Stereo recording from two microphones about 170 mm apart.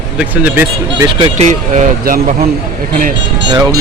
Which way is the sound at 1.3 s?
45° right (ahead or behind).